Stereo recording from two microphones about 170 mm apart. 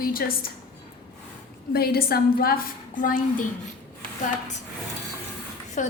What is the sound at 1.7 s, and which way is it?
A woman's voice, 65° left (ahead or behind).